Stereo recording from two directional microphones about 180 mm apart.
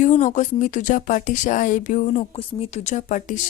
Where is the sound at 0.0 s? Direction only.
40° left (ahead or behind).